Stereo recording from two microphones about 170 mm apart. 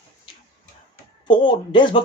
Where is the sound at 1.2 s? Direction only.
30° left (ahead or behind).